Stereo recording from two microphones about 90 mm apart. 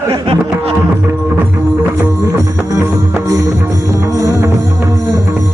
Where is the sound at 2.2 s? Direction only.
35° right (ahead or behind).